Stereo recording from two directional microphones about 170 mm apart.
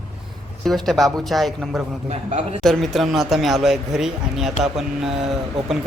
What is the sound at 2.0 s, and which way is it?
Speech, 40° right (ahead or behind).